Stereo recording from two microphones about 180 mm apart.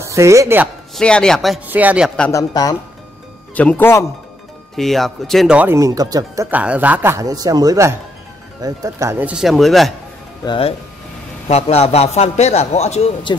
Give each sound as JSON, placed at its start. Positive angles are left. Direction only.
{"t": 0.0, "sound": "speech", "side_deg": -15}
{"t": 0.9, "sound": "speech", "side_deg": 5}
{"t": 1.7, "sound": "speech", "side_deg": -10}
{"t": 2.2, "sound": "speech", "side_deg": 20}
{"t": 10.4, "sound": "a man's voice", "side_deg": 25}